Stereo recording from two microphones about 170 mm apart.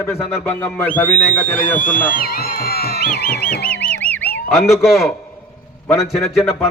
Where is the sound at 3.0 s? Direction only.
60° left (ahead or behind).